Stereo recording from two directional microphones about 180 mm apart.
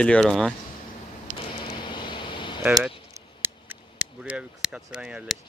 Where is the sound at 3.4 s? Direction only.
10° right (ahead or behind).